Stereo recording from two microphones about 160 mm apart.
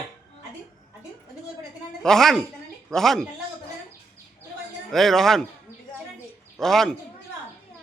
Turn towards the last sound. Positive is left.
turn(degrees=0)  # may be behind; listen again after turning